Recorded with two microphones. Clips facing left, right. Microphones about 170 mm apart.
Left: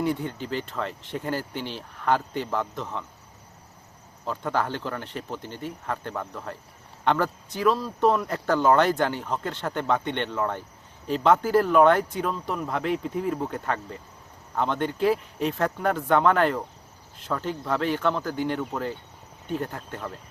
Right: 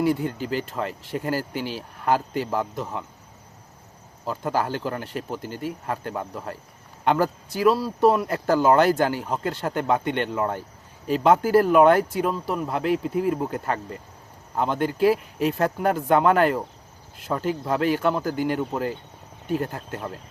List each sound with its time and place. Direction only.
0.0 s speech: 5° right (ahead or behind)
4.3 s speech: 5° right (ahead or behind)
19.9 s speech: 10° right (ahead or behind)